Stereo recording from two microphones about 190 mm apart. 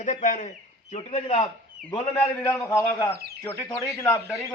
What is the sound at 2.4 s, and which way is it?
Speech, 15° left (ahead or behind).